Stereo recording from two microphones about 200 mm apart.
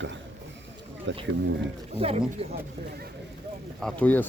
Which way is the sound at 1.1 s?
65° right (ahead or behind).